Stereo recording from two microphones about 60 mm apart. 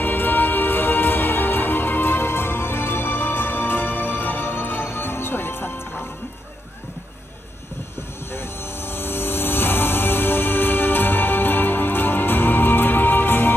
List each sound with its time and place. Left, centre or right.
0.0 s music: left
8.3 s music: left